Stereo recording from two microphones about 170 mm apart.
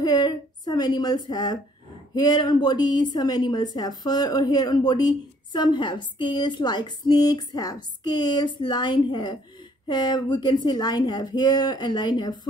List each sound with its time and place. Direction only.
0.0 s a woman's voice: 25° left (ahead or behind)